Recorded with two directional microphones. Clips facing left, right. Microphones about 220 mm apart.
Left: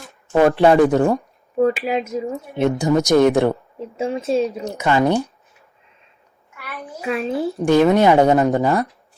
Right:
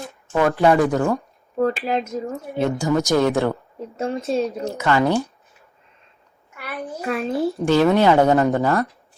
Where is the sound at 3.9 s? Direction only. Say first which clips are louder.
Left 3 dB; centre (ahead or behind).